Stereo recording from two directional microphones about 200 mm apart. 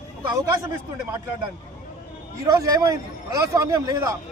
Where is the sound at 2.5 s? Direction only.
15° right (ahead or behind).